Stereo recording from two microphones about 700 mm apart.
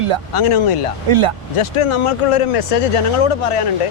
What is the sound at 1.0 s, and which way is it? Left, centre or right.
Speech, right.